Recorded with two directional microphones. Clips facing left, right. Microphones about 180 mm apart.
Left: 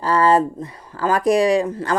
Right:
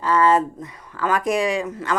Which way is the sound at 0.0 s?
35° left (ahead or behind).